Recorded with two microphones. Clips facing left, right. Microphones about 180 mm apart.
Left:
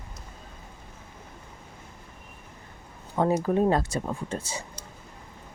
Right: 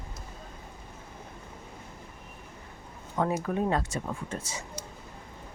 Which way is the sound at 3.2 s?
35° left (ahead or behind).